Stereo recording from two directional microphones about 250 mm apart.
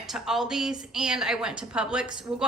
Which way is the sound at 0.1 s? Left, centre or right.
Centre.